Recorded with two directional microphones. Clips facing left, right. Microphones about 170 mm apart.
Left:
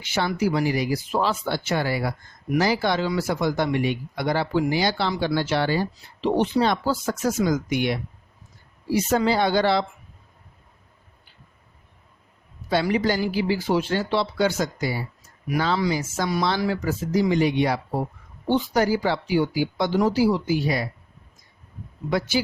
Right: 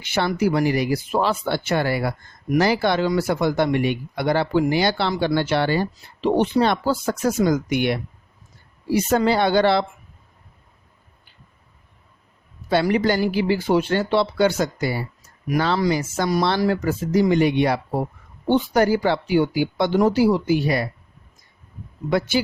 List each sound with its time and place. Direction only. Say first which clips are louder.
0.0 s speech: right 3 dB; 60° right (ahead or behind)
12.7 s speech: right 3 dB; 60° right (ahead or behind)